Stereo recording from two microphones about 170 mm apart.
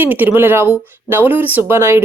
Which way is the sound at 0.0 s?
10° right (ahead or behind).